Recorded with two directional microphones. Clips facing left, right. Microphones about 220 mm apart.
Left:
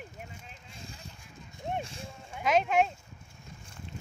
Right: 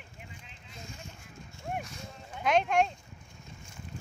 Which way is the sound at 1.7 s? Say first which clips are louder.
Left 2 dB; 30° left (ahead or behind).